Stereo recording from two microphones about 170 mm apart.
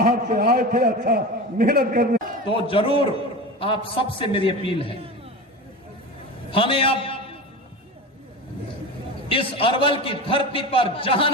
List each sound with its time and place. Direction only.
0.0 s a man's voice: 60° right (ahead or behind)
2.5 s a man's voice: 30° left (ahead or behind)
6.5 s a man's voice: 30° left (ahead or behind)
9.3 s a man's voice: 30° left (ahead or behind)